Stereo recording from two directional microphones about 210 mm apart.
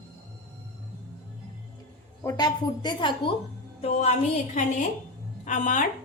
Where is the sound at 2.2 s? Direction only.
15° left (ahead or behind); by 5.9 s 35° left (ahead or behind).